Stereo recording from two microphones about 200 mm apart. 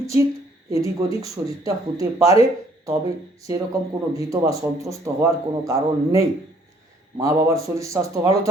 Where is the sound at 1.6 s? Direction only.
15° right (ahead or behind).